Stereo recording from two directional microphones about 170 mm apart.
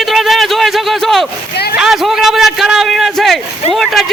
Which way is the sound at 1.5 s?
70° left (ahead or behind).